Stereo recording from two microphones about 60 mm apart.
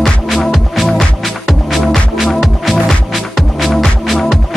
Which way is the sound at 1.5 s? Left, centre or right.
Centre.